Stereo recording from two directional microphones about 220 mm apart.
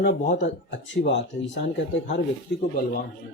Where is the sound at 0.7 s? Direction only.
55° left (ahead or behind).